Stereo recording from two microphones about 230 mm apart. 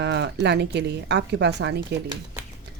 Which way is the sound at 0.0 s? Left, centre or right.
Right.